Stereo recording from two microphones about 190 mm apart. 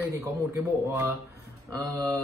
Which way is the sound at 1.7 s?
15° right (ahead or behind).